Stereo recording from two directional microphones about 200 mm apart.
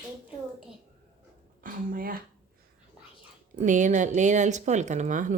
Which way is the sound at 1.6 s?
45° right (ahead or behind).